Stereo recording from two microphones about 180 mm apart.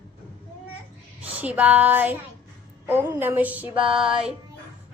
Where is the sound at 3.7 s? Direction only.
30° right (ahead or behind).